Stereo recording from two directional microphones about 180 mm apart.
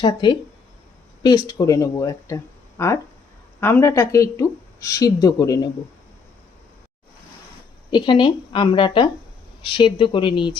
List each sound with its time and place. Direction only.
0.0 s a woman's voice: 25° left (ahead or behind)
7.9 s a woman's voice: 25° left (ahead or behind)